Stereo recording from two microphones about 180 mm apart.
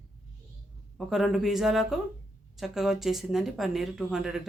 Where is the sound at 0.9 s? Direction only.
Centre (ahead or behind).